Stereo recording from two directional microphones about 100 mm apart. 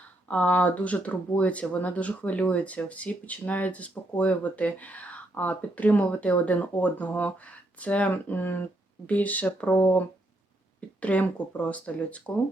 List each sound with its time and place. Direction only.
0.3 s speech: 15° left (ahead or behind)